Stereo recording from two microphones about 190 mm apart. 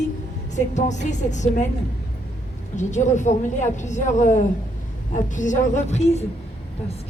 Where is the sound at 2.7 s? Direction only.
40° left (ahead or behind).